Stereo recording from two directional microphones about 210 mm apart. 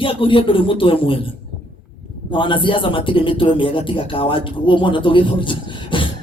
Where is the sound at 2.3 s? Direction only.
25° left (ahead or behind).